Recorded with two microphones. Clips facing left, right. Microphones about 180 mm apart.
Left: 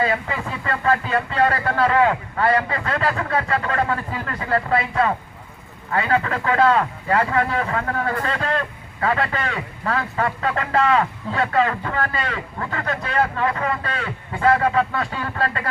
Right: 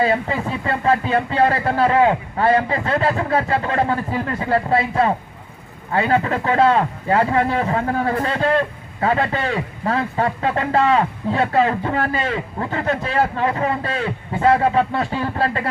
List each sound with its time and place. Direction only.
0.0 s a man's voice: 30° right (ahead or behind)